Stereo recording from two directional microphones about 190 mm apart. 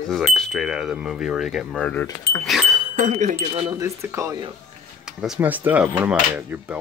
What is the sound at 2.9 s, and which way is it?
Speech, 35° right (ahead or behind).